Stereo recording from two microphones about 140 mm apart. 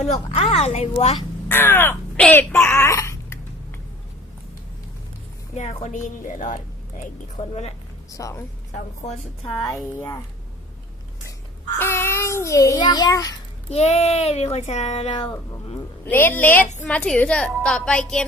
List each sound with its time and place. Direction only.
0.0 s speech: 55° left (ahead or behind)
1.5 s speech: 15° left (ahead or behind)
5.5 s speech: 55° left (ahead or behind)
8.1 s speech: 20° left (ahead or behind)
9.9 s a woman's voice: 15° left (ahead or behind)
11.8 s a child's voice: 15° left (ahead or behind)
13.7 s speech: 50° left (ahead or behind)
16.0 s a woman's voice: 15° left (ahead or behind)